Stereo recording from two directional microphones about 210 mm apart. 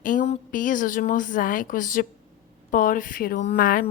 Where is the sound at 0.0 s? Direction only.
40° left (ahead or behind).